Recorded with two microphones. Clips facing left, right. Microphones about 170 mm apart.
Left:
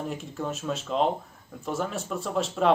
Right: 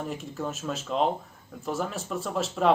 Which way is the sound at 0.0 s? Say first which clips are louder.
Even; centre (ahead or behind).